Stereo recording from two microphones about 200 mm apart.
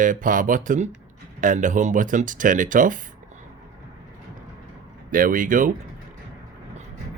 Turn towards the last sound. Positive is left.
turn(degrees=-40)  # may be behind; listen again after turning